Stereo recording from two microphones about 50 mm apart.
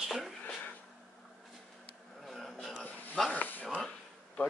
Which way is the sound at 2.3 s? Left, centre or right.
Centre.